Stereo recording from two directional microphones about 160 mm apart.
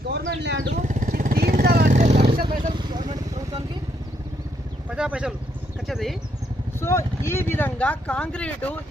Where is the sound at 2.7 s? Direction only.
30° right (ahead or behind).